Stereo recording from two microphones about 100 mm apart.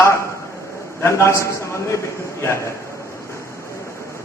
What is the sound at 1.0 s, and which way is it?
A man's voice, 30° left (ahead or behind).